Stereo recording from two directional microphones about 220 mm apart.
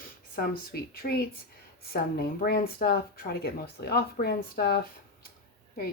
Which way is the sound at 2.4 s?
45° left (ahead or behind).